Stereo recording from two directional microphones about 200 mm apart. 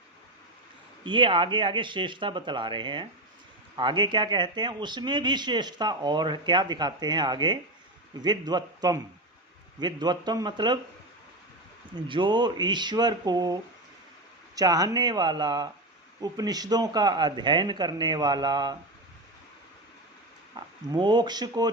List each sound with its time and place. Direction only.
1.0 s speech: 25° right (ahead or behind)
11.9 s speech: 25° right (ahead or behind)
20.8 s speech: 20° right (ahead or behind)